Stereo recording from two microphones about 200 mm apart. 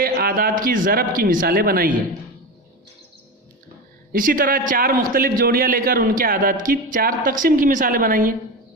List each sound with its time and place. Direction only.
0.0 s a man's voice: 45° right (ahead or behind)
4.1 s a man's voice: 45° right (ahead or behind)